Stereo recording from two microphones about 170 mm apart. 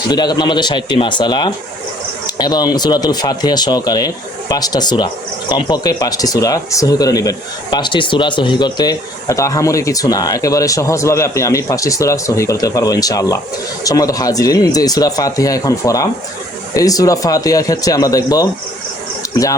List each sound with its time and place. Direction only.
0.1 s speech: 25° left (ahead or behind)